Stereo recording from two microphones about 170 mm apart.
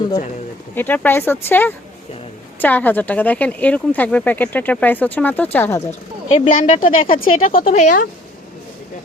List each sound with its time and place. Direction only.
0.8 s speech: 10° left (ahead or behind)
6.4 s a woman's voice: 50° left (ahead or behind)